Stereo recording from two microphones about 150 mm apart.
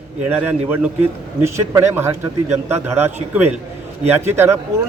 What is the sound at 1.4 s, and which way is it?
A man's voice, 20° right (ahead or behind).